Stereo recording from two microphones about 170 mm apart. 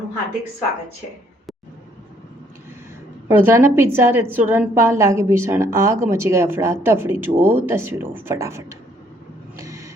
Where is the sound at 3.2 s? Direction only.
15° right (ahead or behind).